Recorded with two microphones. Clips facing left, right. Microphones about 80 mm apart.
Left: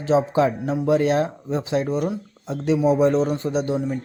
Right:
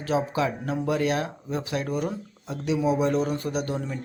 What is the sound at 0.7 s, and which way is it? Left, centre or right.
Speech, centre.